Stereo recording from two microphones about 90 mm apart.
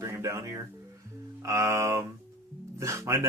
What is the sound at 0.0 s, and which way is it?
Speech, 35° right (ahead or behind).